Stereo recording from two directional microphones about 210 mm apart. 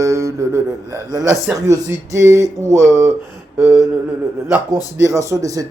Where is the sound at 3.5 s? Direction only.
5° right (ahead or behind).